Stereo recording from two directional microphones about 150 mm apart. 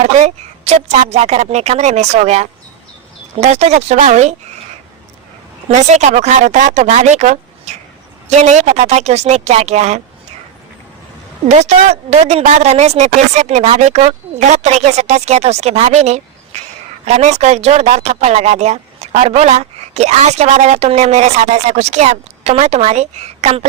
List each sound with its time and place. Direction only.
0.2 s speech: 45° right (ahead or behind)
5.7 s speech: 50° right (ahead or behind)
11.4 s speech: 50° right (ahead or behind)